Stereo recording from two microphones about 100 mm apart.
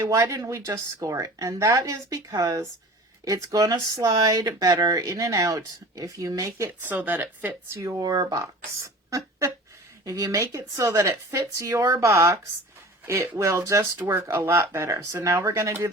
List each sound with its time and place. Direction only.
0.1 s speech: 35° right (ahead or behind)
7.8 s speech: 30° right (ahead or behind)
9.0 s a sound: 30° right (ahead or behind)
10.0 s speech: 35° right (ahead or behind)